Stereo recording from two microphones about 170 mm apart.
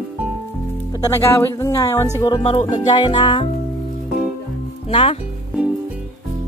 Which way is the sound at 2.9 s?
30° left (ahead or behind).